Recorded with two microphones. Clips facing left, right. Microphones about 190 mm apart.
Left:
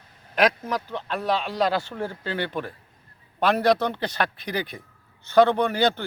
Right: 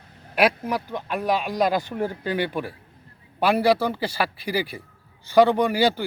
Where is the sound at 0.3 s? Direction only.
10° right (ahead or behind).